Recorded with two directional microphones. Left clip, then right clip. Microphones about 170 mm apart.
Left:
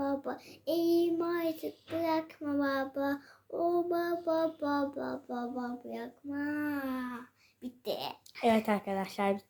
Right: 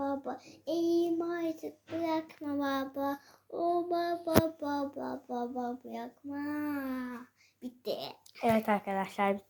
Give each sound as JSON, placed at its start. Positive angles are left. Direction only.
{"t": 0.0, "sound": "child singing", "side_deg": 15}
{"t": 7.6, "sound": "a child's voice", "side_deg": -5}
{"t": 7.9, "sound": "a child's voice", "side_deg": 20}
{"t": 8.5, "sound": "child singing", "side_deg": 10}